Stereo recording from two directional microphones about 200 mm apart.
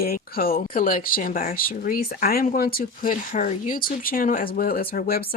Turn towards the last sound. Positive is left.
turn(degrees=50)  # may be behind; listen again after turning